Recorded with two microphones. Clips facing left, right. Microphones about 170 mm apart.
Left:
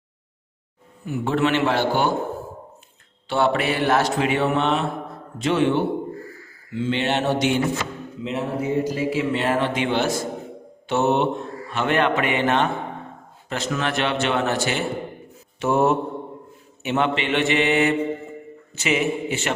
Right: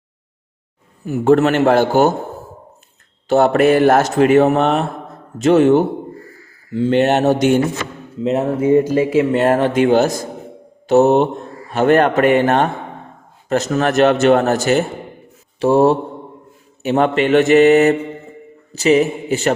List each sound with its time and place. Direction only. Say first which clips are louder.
1.0 s speech: right 9 dB; 45° right (ahead or behind)
3.2 s a man's voice: right 9 dB; 45° right (ahead or behind)
15.5 s mantra: right 7 dB; 35° right (ahead or behind)
16.8 s a man's voice: right 7 dB; 40° right (ahead or behind)